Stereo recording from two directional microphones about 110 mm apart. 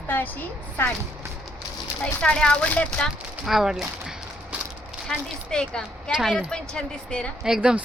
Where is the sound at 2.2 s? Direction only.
10° left (ahead or behind).